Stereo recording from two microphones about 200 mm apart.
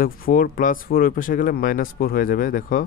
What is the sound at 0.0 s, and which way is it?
Speech, 45° left (ahead or behind).